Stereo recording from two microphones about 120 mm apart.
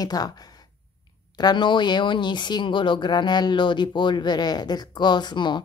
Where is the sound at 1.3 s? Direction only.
35° left (ahead or behind).